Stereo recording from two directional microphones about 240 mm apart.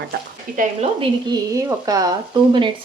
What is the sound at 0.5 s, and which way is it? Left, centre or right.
A woman's voice, right.